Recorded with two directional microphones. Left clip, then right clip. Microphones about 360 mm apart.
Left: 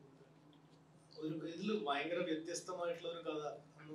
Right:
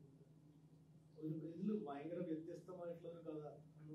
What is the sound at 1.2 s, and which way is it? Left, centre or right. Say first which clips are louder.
A man's voice: left 5 dB; centre.